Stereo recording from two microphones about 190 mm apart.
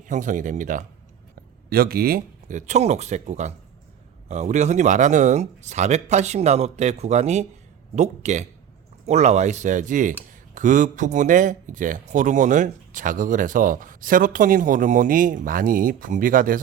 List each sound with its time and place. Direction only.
0.1 s a man's voice: 40° right (ahead or behind)
1.7 s a man's voice: 55° right (ahead or behind)